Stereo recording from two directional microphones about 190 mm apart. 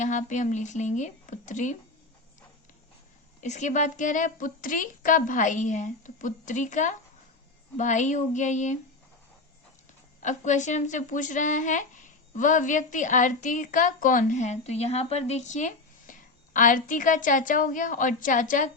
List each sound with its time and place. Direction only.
0.0 s a woman's voice: 40° left (ahead or behind)
3.4 s a woman's voice: 40° left (ahead or behind)
10.2 s a woman's voice: 40° left (ahead or behind)